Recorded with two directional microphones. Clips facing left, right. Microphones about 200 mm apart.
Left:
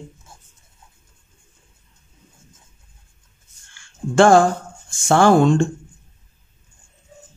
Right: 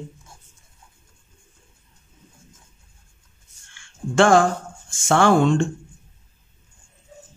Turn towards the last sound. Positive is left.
turn(degrees=40)  # may be behind; listen again after turning